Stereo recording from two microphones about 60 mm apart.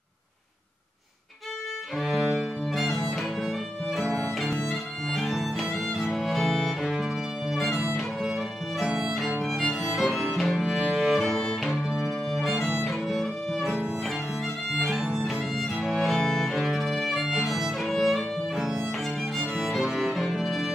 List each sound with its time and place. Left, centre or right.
2.0 s music: centre
8.9 s violin: centre
10.6 s music: centre
11.1 s music: centre
12.8 s violin: centre
14.8 s music: centre
15.1 s violin: centre
15.9 s music: centre
16.5 s violin: centre
19.3 s music: centre